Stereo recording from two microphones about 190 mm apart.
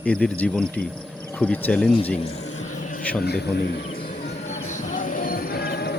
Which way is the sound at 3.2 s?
60° left (ahead or behind).